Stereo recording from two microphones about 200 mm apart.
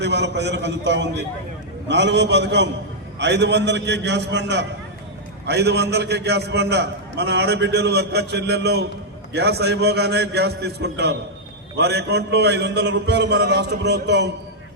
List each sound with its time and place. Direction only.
0.0 s a man's voice: 60° right (ahead or behind)